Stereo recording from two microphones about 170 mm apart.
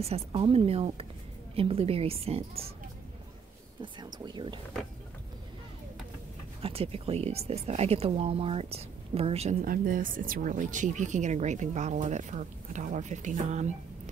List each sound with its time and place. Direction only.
0.0 s a woman's voice: 35° right (ahead or behind)
3.8 s speech: 25° right (ahead or behind)
6.6 s speech: 35° right (ahead or behind)